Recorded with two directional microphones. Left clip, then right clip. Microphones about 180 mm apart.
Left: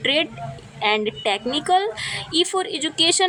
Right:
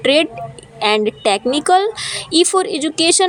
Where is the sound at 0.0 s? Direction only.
30° right (ahead or behind).